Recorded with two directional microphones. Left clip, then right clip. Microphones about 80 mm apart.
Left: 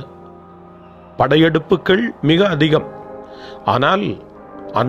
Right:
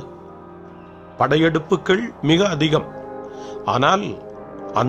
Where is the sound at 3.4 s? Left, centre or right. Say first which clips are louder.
Left 3 dB; left.